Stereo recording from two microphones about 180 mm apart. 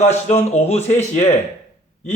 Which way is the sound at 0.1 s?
40° left (ahead or behind).